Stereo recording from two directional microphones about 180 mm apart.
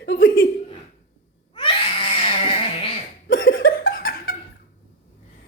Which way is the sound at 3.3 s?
90° left.